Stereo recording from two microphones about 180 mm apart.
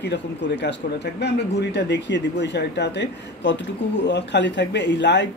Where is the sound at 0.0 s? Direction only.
70° left (ahead or behind).